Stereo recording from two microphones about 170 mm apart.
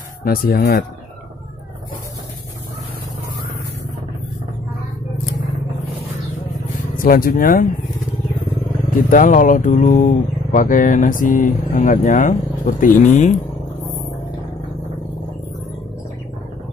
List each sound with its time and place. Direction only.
0.2 s speech: 60° left (ahead or behind)
7.0 s speech: 55° left (ahead or behind)
9.1 s speech: 50° left (ahead or behind)